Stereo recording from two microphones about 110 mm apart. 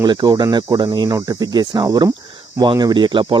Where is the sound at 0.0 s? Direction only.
40° right (ahead or behind).